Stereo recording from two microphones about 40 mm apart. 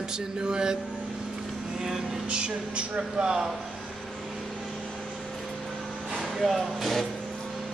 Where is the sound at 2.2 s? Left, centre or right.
Right.